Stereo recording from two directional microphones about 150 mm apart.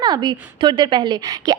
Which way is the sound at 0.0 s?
30° right (ahead or behind).